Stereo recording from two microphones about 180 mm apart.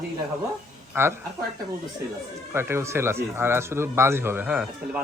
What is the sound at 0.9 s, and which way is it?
Speech, 15° right (ahead or behind).